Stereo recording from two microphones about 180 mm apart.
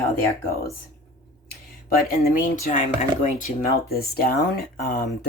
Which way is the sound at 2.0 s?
50° left (ahead or behind).